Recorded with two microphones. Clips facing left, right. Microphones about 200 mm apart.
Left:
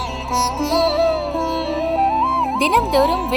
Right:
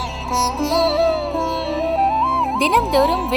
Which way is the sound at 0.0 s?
Centre (ahead or behind).